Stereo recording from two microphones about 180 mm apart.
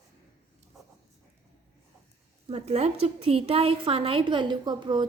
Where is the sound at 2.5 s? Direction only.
35° right (ahead or behind).